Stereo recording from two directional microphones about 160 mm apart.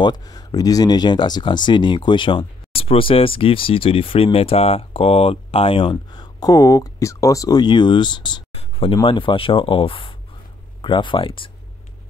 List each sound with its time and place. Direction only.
0.0 s speech: 25° left (ahead or behind)